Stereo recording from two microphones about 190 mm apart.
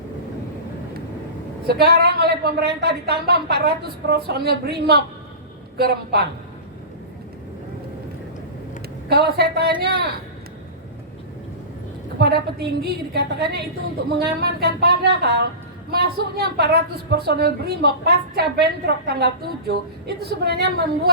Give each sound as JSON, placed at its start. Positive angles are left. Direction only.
{"t": 1.6, "sound": "a woman's voice", "side_deg": -55}
{"t": 9.0, "sound": "a woman's voice", "side_deg": -60}
{"t": 12.2, "sound": "a woman's voice", "side_deg": -60}